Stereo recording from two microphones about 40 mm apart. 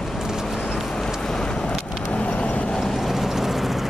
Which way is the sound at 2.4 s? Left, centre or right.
Left.